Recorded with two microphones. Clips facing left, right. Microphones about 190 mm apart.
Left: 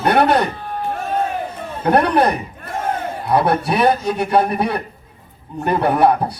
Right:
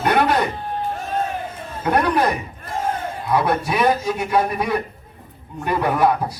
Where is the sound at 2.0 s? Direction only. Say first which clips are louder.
Left 3 dB; 35° left (ahead or behind).